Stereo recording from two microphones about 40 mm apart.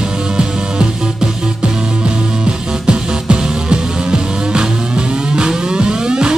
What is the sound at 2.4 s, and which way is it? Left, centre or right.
Music, right.